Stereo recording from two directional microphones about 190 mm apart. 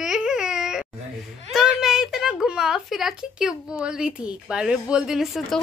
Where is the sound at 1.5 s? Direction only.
Centre (ahead or behind).